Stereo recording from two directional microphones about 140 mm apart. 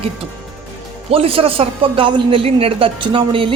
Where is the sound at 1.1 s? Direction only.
40° right (ahead or behind).